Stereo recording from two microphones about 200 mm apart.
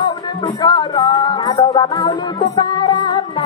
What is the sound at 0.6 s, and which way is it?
Music, 20° left (ahead or behind).